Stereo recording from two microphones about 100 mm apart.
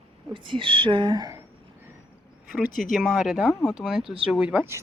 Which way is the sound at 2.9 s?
5° left (ahead or behind).